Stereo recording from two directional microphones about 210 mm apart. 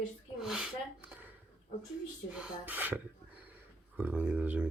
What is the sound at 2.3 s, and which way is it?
Speech, 5° right (ahead or behind).